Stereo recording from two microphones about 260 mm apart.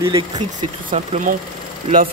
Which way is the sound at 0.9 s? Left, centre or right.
Right.